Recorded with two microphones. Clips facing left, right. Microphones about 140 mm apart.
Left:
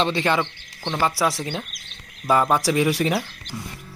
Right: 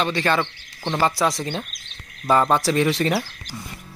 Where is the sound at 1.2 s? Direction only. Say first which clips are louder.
Right 1 dB; 5° left (ahead or behind).